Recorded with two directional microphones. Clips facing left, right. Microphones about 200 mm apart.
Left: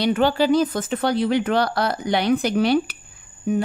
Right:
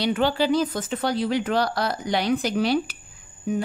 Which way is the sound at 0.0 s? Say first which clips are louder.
Left 3 dB; 50° left (ahead or behind).